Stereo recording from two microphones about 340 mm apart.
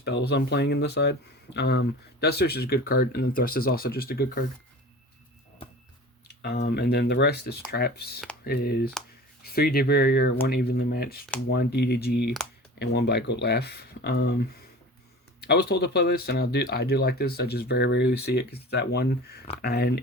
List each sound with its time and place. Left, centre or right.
0.0 s speech: left
6.4 s speech: left